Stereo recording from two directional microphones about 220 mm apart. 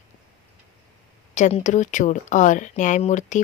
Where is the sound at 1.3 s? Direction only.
30° left (ahead or behind).